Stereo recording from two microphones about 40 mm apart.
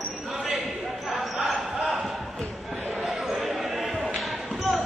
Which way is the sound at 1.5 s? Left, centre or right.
Centre.